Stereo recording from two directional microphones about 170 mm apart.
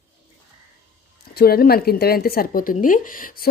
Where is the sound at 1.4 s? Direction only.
65° left (ahead or behind).